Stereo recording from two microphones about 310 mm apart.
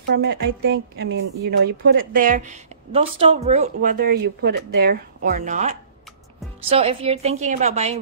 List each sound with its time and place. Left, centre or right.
0.1 s speech: right